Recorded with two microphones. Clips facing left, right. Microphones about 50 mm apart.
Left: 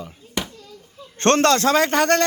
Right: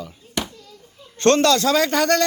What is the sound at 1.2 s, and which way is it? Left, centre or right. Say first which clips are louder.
Speech: even; left.